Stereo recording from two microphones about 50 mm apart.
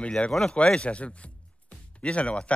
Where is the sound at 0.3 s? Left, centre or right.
Centre.